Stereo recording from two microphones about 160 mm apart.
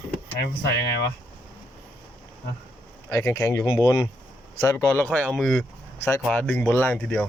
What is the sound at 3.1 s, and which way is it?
Speech, 20° left (ahead or behind).